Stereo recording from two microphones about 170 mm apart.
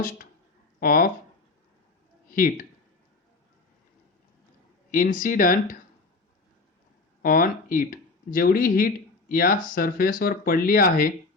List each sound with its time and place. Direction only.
0.8 s speech: 60° left (ahead or behind)
2.3 s speech: 55° left (ahead or behind)
4.9 s speech: 50° left (ahead or behind)
7.2 s speech: 55° left (ahead or behind)